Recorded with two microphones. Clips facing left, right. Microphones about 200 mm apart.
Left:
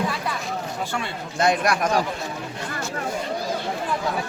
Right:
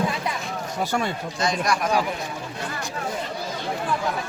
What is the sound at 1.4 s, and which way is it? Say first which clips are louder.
Speech: left 4 dB; 60° left (ahead or behind).